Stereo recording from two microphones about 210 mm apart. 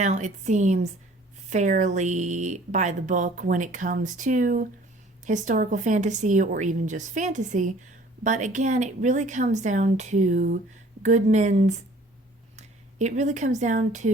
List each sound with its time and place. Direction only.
0.0 s speech: 35° right (ahead or behind)